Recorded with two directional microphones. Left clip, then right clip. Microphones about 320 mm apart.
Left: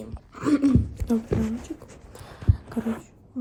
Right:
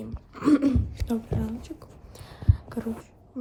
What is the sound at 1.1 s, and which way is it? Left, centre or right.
Speech, left.